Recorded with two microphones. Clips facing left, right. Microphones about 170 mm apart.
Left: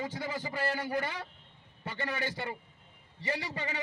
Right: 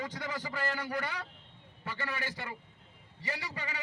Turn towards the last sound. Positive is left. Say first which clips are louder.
# left 4 dB
turn(degrees=30)  # may be behind; listen again after turning